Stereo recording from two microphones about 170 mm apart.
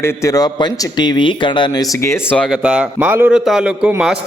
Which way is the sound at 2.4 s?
5° right (ahead or behind).